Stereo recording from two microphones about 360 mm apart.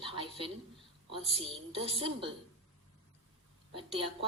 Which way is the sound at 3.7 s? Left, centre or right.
Centre.